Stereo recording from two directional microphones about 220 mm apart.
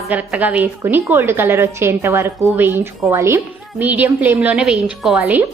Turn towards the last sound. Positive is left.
turn(degrees=-5)  # may be behind; listen again after turning